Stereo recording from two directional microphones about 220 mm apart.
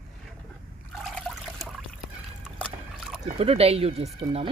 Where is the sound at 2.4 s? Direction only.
5° right (ahead or behind).